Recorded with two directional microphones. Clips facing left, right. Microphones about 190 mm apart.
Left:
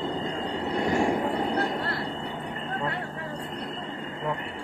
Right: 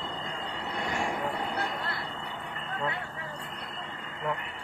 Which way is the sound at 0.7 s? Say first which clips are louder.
Left 8 dB; 35° left (ahead or behind).